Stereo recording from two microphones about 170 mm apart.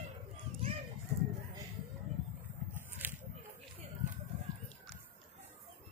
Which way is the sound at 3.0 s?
10° right (ahead or behind).